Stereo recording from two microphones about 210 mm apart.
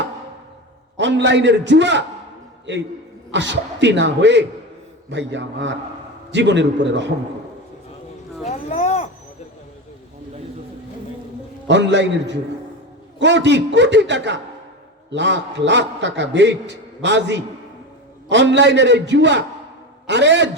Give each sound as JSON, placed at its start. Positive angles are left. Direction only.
{"t": 0.9, "sound": "a man's voice", "side_deg": -55}
{"t": 8.4, "sound": "a sound", "side_deg": 30}
{"t": 11.7, "sound": "a man's voice", "side_deg": -55}